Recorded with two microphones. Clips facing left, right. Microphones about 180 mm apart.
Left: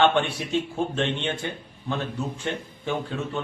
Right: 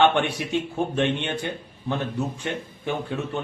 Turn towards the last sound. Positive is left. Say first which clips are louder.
# right 1 dB
turn(degrees=-15)  # may be behind; listen again after turning